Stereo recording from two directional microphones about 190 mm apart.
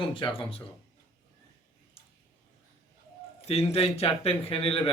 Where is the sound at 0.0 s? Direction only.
25° left (ahead or behind).